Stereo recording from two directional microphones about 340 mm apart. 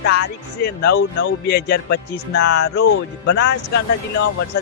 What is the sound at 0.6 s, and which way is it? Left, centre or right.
Speech, left.